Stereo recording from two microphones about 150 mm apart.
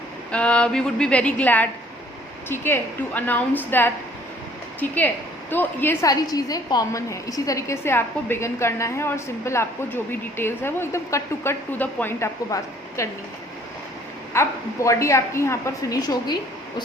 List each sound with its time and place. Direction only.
0.3 s a woman's voice: 5° left (ahead or behind)
14.3 s a woman's voice: 15° left (ahead or behind)